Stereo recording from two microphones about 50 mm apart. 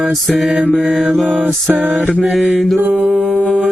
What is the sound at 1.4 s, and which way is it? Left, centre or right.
Music, right.